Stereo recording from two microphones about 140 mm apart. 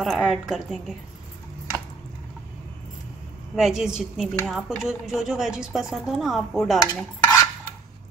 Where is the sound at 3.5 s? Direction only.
5° right (ahead or behind).